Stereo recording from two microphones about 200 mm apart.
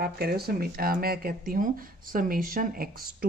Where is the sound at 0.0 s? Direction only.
50° right (ahead or behind).